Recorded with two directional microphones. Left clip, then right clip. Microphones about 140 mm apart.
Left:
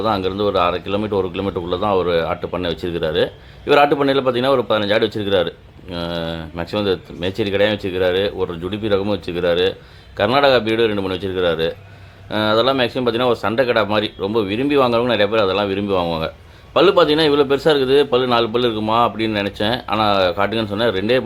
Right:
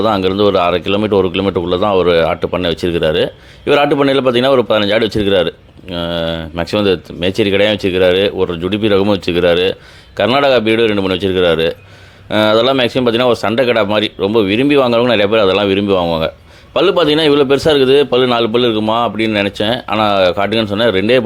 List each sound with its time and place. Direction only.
0.0 s a man's voice: 45° right (ahead or behind)